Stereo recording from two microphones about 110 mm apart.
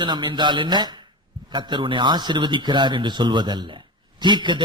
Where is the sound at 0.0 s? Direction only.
45° right (ahead or behind).